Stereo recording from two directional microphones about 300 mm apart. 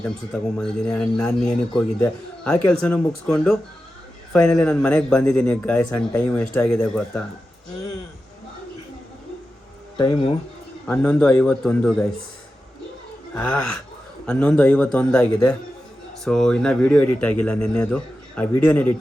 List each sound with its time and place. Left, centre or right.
0.6 s a man's voice: centre
10.0 s speech: centre
10.8 s a man's voice: centre
13.3 s a man's voice: centre